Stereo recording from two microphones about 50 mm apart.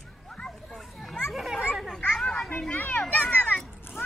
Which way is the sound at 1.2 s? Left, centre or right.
Centre.